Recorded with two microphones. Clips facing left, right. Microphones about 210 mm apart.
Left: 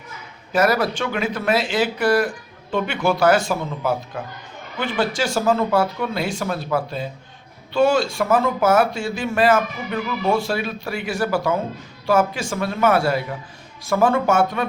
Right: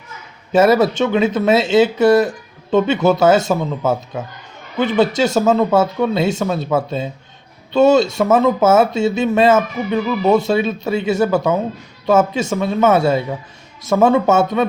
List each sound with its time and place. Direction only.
0.5 s speech: 25° right (ahead or behind)